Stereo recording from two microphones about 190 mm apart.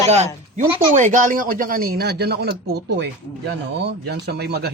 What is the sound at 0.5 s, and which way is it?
Speech, 40° right (ahead or behind).